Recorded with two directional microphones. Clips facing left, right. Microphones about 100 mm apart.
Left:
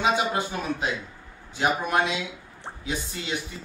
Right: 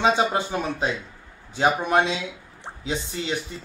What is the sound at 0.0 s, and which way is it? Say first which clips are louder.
A man's voice: right 3 dB; 30° right (ahead or behind).